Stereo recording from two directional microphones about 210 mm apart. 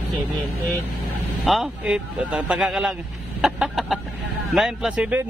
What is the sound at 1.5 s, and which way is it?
A man's voice, 5° right (ahead or behind).